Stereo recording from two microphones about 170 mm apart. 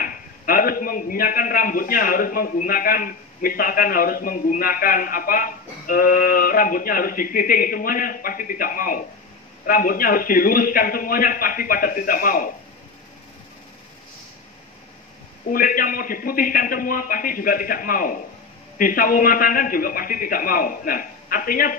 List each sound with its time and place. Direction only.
0.0 s a man's voice: 55° left (ahead or behind)
15.5 s a man's voice: 55° left (ahead or behind)